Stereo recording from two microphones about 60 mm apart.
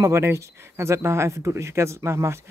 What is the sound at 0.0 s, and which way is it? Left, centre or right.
Speech, right.